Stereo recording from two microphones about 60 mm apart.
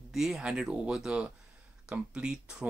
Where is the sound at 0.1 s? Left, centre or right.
Centre.